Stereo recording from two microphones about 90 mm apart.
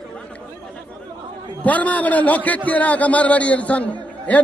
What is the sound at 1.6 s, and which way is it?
A man's voice, 15° left (ahead or behind).